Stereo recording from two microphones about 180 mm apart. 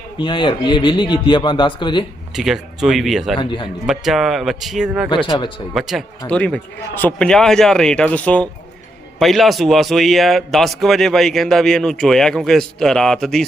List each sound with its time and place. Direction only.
0.2 s speech: 25° left (ahead or behind)
2.3 s a man's voice: centre (ahead or behind)
3.3 s speech: 25° left (ahead or behind)
3.8 s a man's voice: centre (ahead or behind)
5.0 s speech: 25° left (ahead or behind)
5.7 s a man's voice: centre (ahead or behind)